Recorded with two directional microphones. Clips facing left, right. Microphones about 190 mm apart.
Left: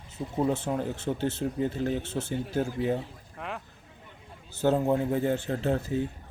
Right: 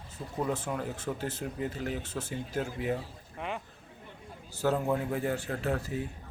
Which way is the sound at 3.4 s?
Centre (ahead or behind).